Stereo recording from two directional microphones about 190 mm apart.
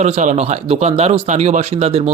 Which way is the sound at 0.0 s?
40° right (ahead or behind).